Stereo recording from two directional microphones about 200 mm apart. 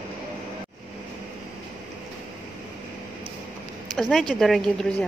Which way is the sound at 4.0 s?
Centre (ahead or behind).